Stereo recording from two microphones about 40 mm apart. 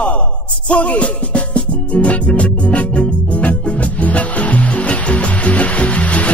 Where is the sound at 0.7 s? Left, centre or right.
Left.